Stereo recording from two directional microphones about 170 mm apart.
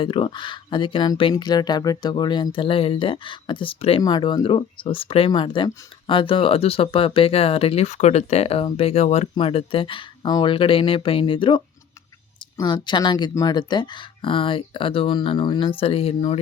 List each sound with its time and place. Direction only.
0.0 s speech: 30° left (ahead or behind)